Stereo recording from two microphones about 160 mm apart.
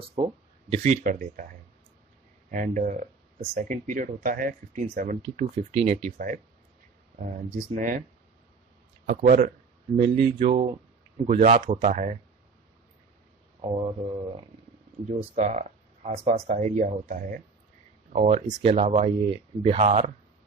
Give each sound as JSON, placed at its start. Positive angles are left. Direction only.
{"t": 0.2, "sound": "speech", "side_deg": -40}
{"t": 1.0, "sound": "speech", "side_deg": -55}
{"t": 7.7, "sound": "speech", "side_deg": -55}
{"t": 9.2, "sound": "speech", "side_deg": -55}
{"t": 10.1, "sound": "speech", "side_deg": -35}
{"t": 11.2, "sound": "speech", "side_deg": -65}
{"t": 11.8, "sound": "speech", "side_deg": -50}
{"t": 13.6, "sound": "speech", "side_deg": -40}